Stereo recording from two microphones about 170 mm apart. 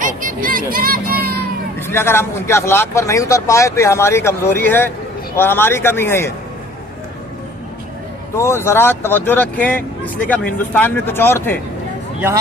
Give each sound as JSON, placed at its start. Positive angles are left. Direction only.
{"t": 0.0, "sound": "vehicle", "side_deg": -55}
{"t": 1.9, "sound": "speech", "side_deg": 15}
{"t": 8.4, "sound": "speech", "side_deg": 15}